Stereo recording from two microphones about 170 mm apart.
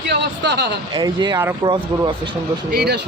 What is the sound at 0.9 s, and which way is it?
Speech, 25° right (ahead or behind).